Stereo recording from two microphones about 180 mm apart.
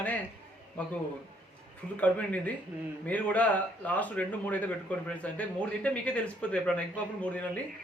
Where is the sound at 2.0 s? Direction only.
5° left (ahead or behind).